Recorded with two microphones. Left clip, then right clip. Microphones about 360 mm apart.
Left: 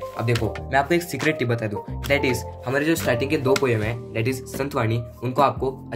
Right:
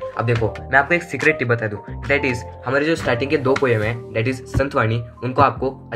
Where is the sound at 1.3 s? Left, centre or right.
Centre.